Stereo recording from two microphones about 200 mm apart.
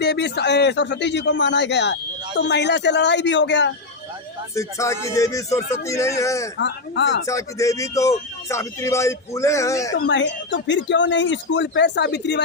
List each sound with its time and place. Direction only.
0.0 s a man's voice: 55° left (ahead or behind)
4.5 s speech: 15° left (ahead or behind)
6.6 s a man's voice: 60° left (ahead or behind)
7.3 s speech: 15° left (ahead or behind)
9.9 s a man's voice: 65° left (ahead or behind)